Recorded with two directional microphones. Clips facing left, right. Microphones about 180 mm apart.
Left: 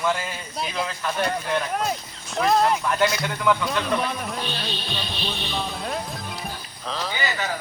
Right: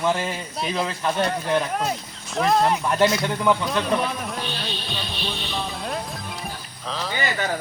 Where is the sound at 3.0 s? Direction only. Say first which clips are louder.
Right 3 dB; 25° right (ahead or behind).